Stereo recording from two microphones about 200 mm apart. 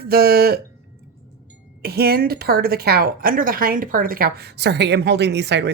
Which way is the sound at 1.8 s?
50° right (ahead or behind).